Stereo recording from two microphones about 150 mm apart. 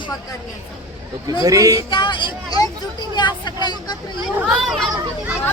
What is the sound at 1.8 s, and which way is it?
Speech, 30° left (ahead or behind).